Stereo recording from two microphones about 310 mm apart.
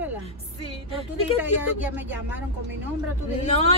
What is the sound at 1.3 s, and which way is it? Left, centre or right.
Speech, centre.